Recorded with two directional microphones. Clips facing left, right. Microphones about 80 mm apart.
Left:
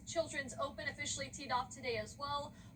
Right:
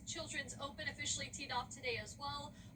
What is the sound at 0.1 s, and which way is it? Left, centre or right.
A woman's voice, left.